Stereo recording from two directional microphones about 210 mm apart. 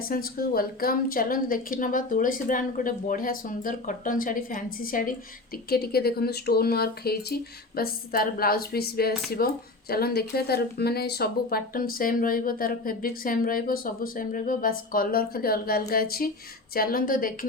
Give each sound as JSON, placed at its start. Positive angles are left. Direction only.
{"t": 0.0, "sound": "a woman's voice", "side_deg": 45}